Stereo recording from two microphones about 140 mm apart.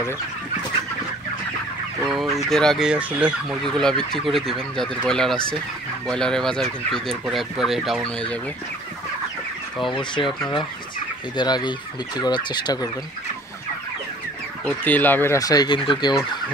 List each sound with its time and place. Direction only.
2.0 s speech: centre (ahead or behind)
3.6 s speech: 5° left (ahead or behind)
9.8 s speech: 35° left (ahead or behind)
11.3 s speech: 30° left (ahead or behind)
14.6 s speech: 10° left (ahead or behind)
15.3 s fowl: 25° left (ahead or behind)